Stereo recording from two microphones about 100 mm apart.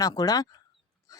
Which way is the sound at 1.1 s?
35° left (ahead or behind).